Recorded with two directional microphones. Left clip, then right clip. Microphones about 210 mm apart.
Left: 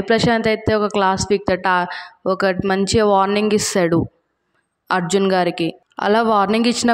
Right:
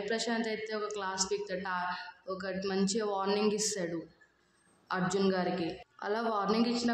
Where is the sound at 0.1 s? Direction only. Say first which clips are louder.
Left 19 dB; 45° left (ahead or behind).